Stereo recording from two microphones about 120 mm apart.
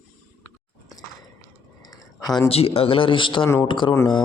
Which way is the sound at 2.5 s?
55° left (ahead or behind).